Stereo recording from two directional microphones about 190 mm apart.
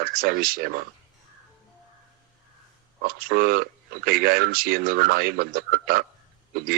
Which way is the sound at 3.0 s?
50° right (ahead or behind).